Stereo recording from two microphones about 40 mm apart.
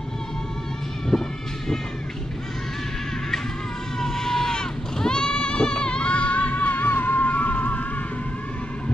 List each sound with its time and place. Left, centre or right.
1.1 s vehicle: centre
4.0 s goat: centre; by 7.8 s left